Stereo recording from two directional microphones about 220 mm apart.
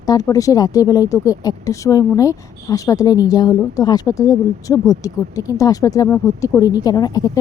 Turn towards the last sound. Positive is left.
turn(degrees=15)  # may be behind; listen again after turning